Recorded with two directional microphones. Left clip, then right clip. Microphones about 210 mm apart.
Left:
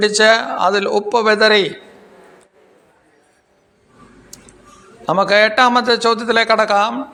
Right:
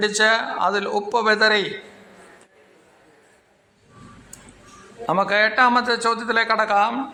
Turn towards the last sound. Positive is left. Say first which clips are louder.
# left 5 dB
turn(degrees=15)  # may be behind; listen again after turning